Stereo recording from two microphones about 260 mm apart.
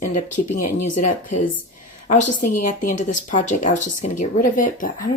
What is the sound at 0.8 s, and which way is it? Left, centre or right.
Speech, left.